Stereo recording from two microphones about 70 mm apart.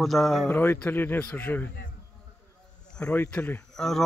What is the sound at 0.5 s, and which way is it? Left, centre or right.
Speech, left.